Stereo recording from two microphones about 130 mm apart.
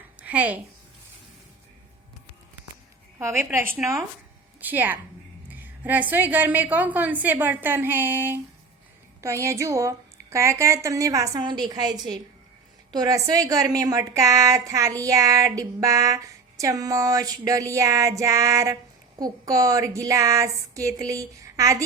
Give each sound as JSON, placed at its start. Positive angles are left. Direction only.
{"t": 0.2, "sound": "a woman's voice", "side_deg": -10}
{"t": 3.2, "sound": "a woman's voice", "side_deg": -20}